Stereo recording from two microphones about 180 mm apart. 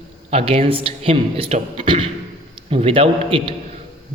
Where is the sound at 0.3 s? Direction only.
35° right (ahead or behind).